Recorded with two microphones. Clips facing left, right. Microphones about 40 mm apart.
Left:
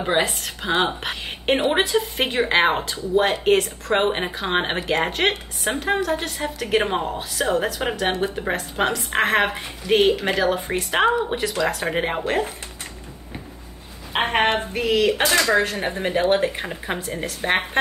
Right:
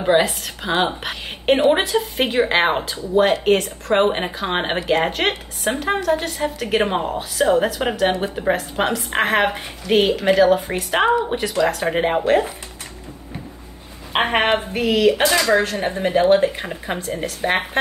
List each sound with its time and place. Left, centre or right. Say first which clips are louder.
0.0 s a woman's voice: right 4 dB; centre
14.3 s a woman's voice: even; centre
14.8 s a woman's voice: right 3 dB; centre